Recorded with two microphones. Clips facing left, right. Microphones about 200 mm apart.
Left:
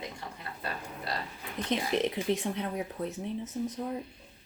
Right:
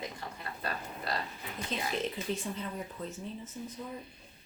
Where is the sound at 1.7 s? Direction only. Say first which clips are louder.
Left 6 dB; 70° left (ahead or behind).